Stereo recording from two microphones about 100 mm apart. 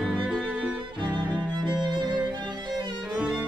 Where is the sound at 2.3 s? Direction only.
50° right (ahead or behind).